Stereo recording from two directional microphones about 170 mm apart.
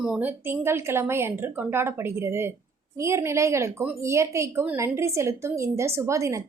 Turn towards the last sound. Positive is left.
turn(degrees=-15)  # may be behind; listen again after turning